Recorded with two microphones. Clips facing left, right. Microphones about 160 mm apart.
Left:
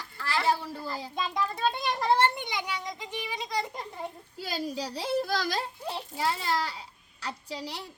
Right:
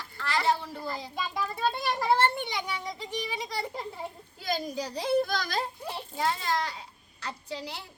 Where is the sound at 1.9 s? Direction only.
5° right (ahead or behind).